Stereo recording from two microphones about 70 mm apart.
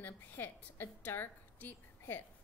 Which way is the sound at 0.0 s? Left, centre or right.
Left.